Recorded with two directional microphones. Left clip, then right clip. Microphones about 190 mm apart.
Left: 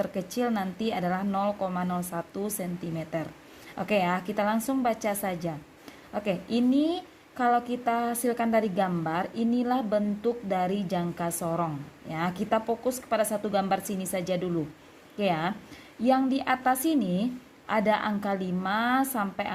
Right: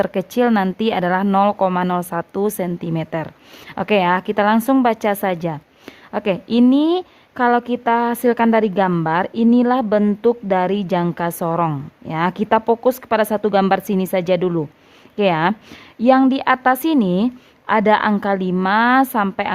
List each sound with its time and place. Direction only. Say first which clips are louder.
0.0 s a woman's voice: right 12 dB; 45° right (ahead or behind)